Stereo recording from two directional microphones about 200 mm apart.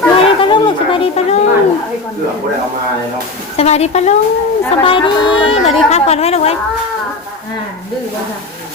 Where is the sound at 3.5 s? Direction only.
30° left (ahead or behind).